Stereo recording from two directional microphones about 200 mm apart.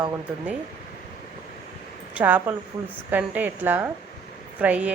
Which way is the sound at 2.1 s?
10° right (ahead or behind).